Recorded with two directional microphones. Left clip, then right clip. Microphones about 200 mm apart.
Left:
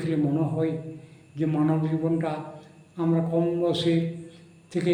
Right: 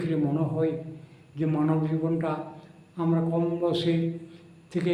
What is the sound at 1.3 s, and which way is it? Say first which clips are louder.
A man's voice: left 1 dB; 20° right (ahead or behind).